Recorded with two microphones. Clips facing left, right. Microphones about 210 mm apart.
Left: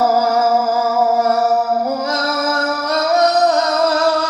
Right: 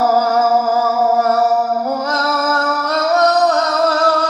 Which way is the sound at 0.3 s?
20° left (ahead or behind).